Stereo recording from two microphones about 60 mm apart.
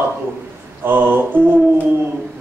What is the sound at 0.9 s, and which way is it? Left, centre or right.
Speech, right.